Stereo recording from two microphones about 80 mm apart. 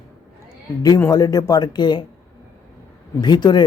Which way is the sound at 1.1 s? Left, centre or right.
Left.